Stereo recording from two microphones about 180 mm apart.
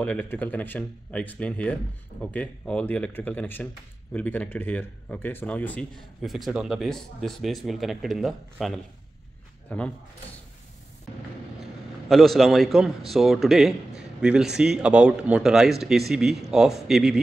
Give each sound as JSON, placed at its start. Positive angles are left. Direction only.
{"t": 0.0, "sound": "speech", "side_deg": 10}
{"t": 12.1, "sound": "speech", "side_deg": 0}